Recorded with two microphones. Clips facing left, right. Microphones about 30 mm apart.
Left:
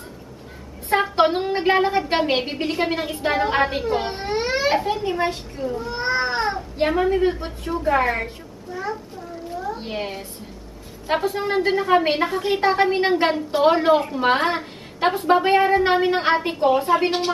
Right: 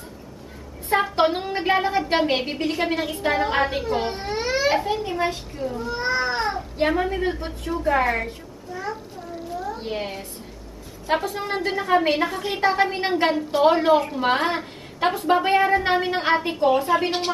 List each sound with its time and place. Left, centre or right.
1.0 s a woman's voice: centre
11.3 s a woman's voice: centre